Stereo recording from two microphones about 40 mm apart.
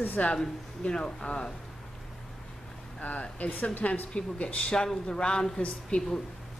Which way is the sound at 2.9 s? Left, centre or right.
Left.